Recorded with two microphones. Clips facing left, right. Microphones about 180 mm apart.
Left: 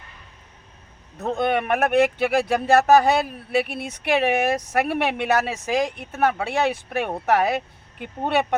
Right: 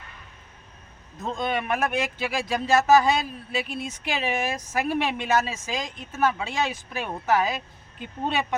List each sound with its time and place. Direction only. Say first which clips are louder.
1.2 s speech: left 5 dB; 65° left (ahead or behind)